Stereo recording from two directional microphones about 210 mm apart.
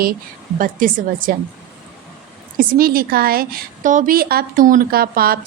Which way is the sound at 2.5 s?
45° right (ahead or behind).